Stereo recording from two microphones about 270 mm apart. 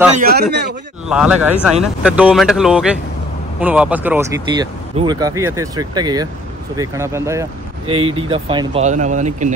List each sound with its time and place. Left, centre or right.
0.2 s a man's voice: right
1.0 s speech: centre; by 9.5 s right